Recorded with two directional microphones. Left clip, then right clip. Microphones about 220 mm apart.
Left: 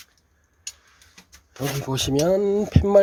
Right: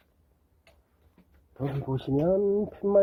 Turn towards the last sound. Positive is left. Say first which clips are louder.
# left 6 dB
turn(degrees=20)  # may be behind; listen again after turning